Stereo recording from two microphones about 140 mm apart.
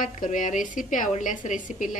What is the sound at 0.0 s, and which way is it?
A woman's voice, 70° left (ahead or behind).